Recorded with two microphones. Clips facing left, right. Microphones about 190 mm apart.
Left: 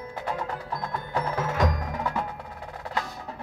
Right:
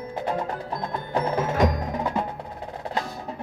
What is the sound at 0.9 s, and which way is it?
Wood block, 20° right (ahead or behind).